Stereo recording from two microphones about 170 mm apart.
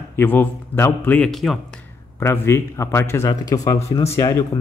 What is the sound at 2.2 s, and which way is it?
Speech, 15° left (ahead or behind).